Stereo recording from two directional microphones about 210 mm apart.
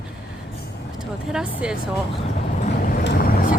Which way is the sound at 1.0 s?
5° right (ahead or behind).